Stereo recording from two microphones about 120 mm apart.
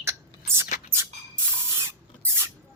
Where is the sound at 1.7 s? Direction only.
20° right (ahead or behind).